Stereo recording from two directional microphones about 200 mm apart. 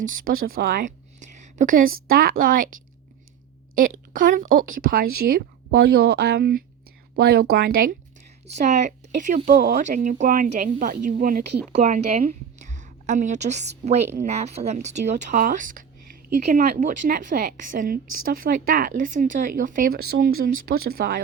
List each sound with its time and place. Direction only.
0.0 s a woman's voice: 40° right (ahead or behind)
3.8 s a woman's voice: 45° right (ahead or behind)
8.4 s a woman's voice: 35° right (ahead or behind)